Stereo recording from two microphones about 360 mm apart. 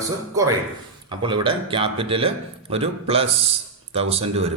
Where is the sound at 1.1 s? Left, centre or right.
Centre.